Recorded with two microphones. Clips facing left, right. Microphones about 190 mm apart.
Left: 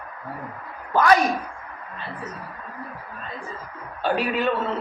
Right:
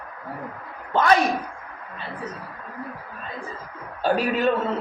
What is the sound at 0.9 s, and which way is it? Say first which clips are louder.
Speech: left 1 dB; 25° right (ahead or behind).